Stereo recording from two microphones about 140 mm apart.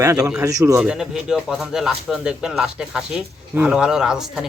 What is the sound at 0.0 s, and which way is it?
Speech, 25° right (ahead or behind).